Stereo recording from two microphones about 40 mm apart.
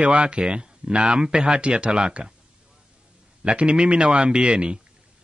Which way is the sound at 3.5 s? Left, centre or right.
Right.